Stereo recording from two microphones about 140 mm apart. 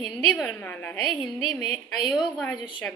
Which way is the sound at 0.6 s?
10° left (ahead or behind).